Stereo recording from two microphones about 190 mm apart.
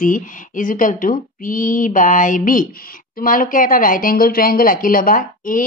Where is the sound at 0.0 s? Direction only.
45° left (ahead or behind).